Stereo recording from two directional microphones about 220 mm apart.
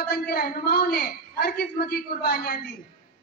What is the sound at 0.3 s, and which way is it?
A man's voice, 45° left (ahead or behind).